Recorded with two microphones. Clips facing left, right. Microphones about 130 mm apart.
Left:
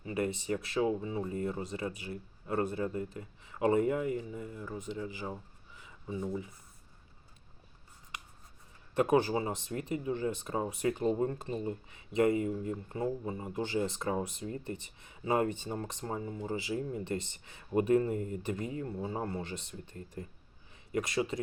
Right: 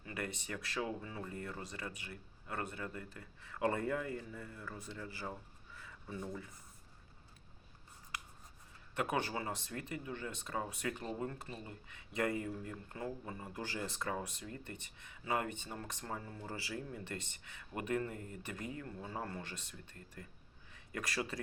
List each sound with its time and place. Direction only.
0.0 s speech: 25° left (ahead or behind)
9.0 s speech: 30° left (ahead or behind)